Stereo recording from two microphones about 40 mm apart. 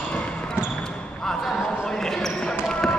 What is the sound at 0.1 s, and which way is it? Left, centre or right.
Basketball bounce, left.